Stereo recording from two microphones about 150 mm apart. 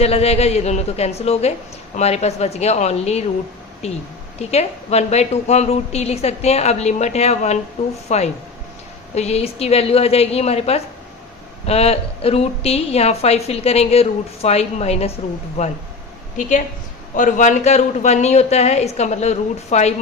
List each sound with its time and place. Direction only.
0.0 s a woman's voice: 45° left (ahead or behind)
17.2 s a woman's voice: 55° left (ahead or behind)